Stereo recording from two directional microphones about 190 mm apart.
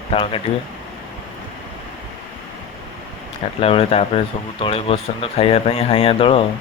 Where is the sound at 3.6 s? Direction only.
30° left (ahead or behind).